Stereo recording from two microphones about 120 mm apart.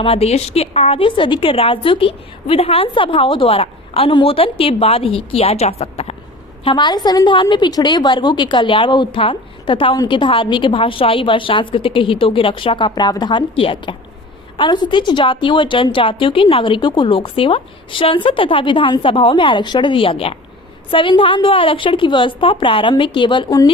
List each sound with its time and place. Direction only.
0.0 s a woman's voice: 55° left (ahead or behind)
6.7 s a woman's voice: 40° left (ahead or behind)